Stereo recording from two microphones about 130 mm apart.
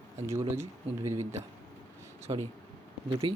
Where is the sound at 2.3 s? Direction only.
30° right (ahead or behind).